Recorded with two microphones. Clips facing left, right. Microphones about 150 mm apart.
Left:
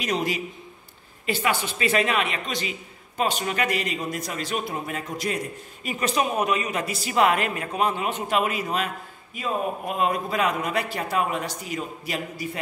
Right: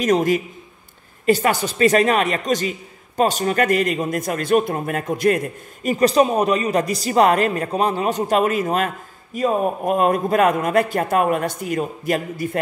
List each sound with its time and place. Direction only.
0.0 s a man's voice: 45° right (ahead or behind)
5.9 s a man's voice: 35° right (ahead or behind); by 12.4 s 50° right (ahead or behind)